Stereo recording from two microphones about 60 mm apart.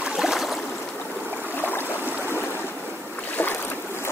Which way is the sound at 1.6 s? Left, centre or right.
Left.